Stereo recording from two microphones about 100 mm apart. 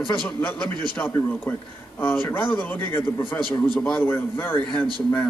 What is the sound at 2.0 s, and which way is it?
Speech, 20° left (ahead or behind).